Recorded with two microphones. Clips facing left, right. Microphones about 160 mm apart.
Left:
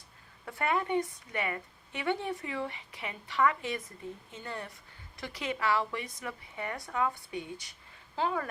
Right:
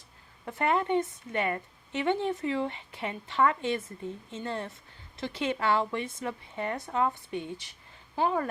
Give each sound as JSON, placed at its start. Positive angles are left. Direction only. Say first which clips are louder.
{"t": 0.4, "sound": "speech", "louder": "right 4 dB", "side_deg": -20}